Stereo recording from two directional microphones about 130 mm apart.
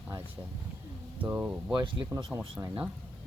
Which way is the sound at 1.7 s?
35° right (ahead or behind).